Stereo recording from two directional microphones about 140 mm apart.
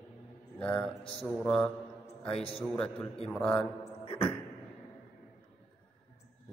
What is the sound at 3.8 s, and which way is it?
Beatboxing, 40° left (ahead or behind).